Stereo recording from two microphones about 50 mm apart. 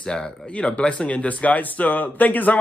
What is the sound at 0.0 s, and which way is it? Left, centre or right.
Speech, centre.